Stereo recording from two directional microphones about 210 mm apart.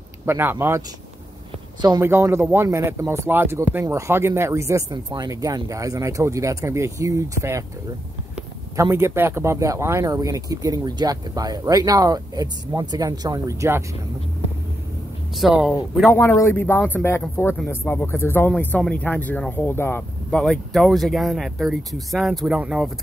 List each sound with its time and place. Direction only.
0.2 s speech: 10° right (ahead or behind)
8.7 s speech: 15° right (ahead or behind)
15.3 s speech: centre (ahead or behind)
16.1 s speech: 15° left (ahead or behind); by 22.8 s 5° right (ahead or behind)